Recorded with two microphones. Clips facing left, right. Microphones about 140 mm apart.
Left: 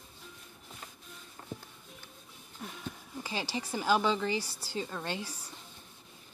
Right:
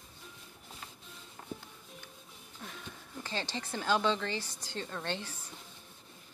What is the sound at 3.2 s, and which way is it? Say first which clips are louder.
Speech: left 2 dB; 10° left (ahead or behind).